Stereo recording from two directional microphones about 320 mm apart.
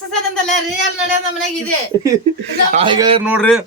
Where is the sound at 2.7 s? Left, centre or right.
Centre.